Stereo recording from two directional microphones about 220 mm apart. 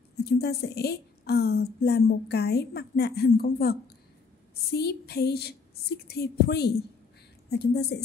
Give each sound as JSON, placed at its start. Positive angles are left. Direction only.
{"t": 0.2, "sound": "a woman's voice", "side_deg": 45}